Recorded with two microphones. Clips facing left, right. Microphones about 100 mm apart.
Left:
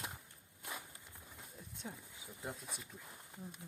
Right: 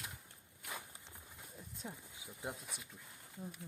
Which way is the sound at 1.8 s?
5° right (ahead or behind).